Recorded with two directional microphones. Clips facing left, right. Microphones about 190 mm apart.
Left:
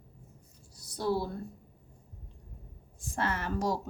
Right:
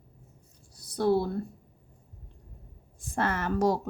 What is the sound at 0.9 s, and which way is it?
Speech, 55° right (ahead or behind).